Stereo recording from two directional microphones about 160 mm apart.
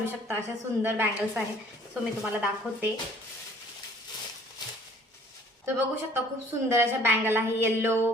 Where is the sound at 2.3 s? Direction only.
10° right (ahead or behind).